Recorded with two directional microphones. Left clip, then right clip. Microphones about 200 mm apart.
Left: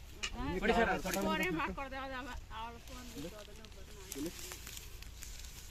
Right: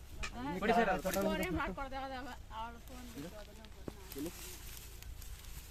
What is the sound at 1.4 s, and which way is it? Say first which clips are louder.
Speech: left 2 dB; 60° right (ahead or behind).